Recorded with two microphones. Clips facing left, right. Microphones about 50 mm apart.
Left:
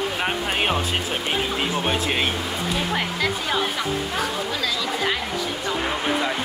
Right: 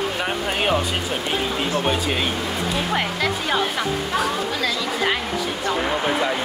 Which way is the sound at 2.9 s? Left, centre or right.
Centre.